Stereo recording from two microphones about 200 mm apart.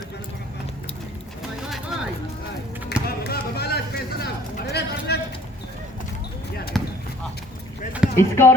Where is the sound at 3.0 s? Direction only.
50° left (ahead or behind).